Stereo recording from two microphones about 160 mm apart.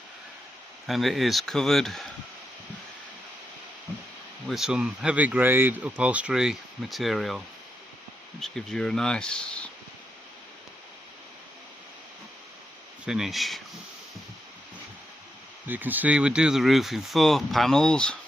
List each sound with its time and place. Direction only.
0.9 s speech: centre (ahead or behind)
4.4 s speech: 5° right (ahead or behind)
13.1 s speech: centre (ahead or behind)
15.6 s speech: 10° right (ahead or behind); by 18.2 s 5° left (ahead or behind)